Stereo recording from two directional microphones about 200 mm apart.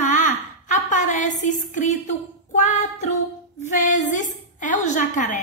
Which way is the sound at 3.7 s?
40° left (ahead or behind).